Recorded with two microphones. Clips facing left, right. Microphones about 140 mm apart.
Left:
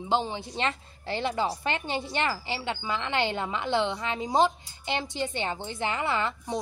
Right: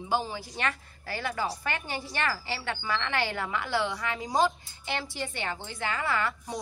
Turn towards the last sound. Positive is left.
turn(degrees=20)  # may be behind; listen again after turning